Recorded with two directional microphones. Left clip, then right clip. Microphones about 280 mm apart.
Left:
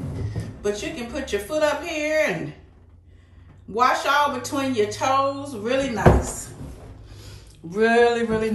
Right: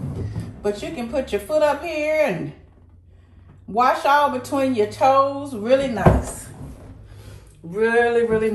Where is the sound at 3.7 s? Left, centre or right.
Centre.